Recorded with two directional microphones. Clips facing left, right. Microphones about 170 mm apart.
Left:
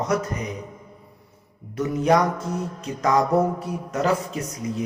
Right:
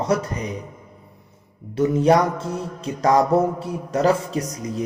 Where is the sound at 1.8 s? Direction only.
30° right (ahead or behind).